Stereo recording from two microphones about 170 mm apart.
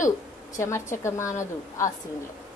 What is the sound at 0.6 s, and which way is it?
A woman's voice, 15° left (ahead or behind).